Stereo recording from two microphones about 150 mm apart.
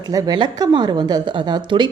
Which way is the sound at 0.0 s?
25° right (ahead or behind).